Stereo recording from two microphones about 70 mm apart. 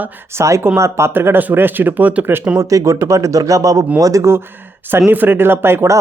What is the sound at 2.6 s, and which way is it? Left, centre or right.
Speech, right.